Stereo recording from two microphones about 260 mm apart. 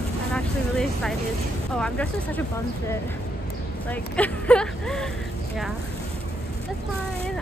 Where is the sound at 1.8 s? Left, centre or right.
Centre.